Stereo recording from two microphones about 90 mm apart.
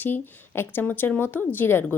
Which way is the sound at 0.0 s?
25° left (ahead or behind).